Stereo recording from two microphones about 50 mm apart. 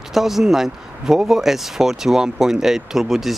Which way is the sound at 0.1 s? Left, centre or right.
Centre.